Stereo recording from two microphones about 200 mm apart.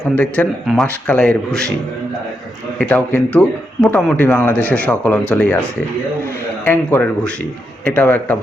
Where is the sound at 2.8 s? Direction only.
10° left (ahead or behind).